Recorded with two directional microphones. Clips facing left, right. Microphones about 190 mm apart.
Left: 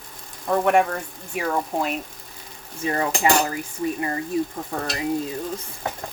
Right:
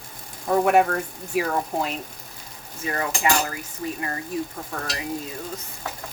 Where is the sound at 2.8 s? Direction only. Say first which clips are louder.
Left 3 dB; 30° left (ahead or behind).